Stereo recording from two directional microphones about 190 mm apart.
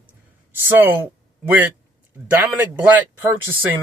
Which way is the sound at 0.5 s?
10° right (ahead or behind).